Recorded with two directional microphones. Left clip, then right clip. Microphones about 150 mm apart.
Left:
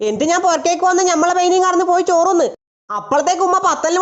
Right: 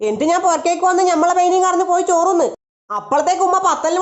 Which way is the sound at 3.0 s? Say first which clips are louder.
Even; 20° left (ahead or behind).